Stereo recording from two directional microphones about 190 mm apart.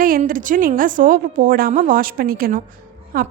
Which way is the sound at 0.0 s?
45° right (ahead or behind).